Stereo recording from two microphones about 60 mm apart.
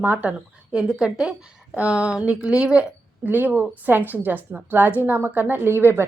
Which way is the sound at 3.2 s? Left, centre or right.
Right.